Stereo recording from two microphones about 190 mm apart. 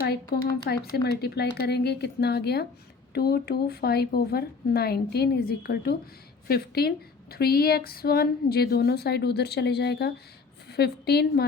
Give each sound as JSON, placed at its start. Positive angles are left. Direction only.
{"t": 0.6, "sound": "a woman's voice", "side_deg": 55}